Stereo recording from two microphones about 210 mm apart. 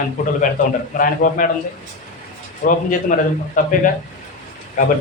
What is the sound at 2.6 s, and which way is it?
A man's voice, 45° left (ahead or behind).